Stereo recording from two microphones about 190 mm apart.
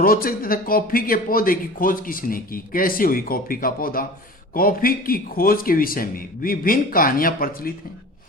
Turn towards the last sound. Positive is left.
turn(degrees=50)  # may be behind; listen again after turning